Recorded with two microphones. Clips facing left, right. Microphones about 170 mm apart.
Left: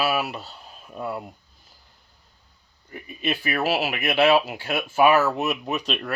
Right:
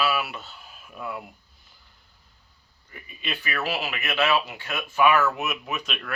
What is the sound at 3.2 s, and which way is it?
Speech, 40° left (ahead or behind).